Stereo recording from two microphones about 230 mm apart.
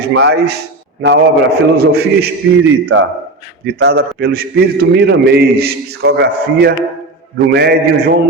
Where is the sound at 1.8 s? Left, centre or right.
Right.